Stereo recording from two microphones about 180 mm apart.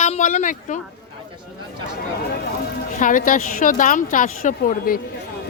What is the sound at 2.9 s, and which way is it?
A woman's voice, 45° left (ahead or behind).